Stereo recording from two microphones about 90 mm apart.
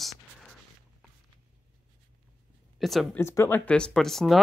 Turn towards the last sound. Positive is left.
turn(degrees=5)  # may be behind; listen again after turning